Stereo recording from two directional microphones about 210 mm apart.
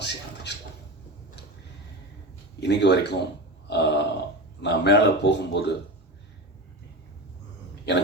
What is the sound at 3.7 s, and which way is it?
Grunt, 55° left (ahead or behind).